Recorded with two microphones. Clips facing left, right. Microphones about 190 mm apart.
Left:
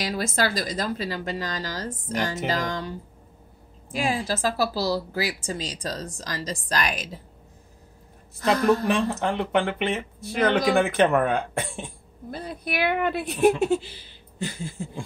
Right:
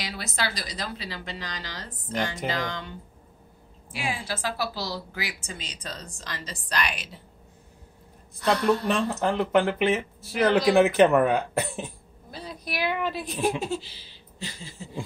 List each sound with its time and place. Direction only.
0.0 s a woman's voice: 45° left (ahead or behind)
8.5 s a woman's voice: 45° left (ahead or behind)
8.8 s speech: centre (ahead or behind)
12.3 s a woman's voice: 55° left (ahead or behind)